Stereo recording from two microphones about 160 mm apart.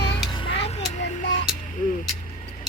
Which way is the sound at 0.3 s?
40° left (ahead or behind).